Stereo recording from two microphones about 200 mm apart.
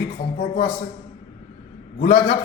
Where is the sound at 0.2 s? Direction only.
40° left (ahead or behind).